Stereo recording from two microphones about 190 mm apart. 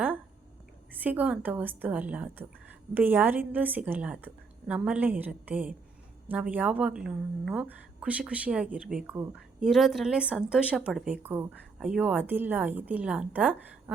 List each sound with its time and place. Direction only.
1.0 s a woman's voice: 10° right (ahead or behind)